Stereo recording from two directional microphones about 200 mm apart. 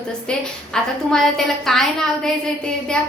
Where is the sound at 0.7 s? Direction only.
Centre (ahead or behind).